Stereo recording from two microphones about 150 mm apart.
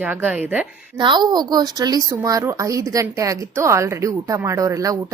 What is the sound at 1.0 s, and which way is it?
A woman's voice, 30° right (ahead or behind).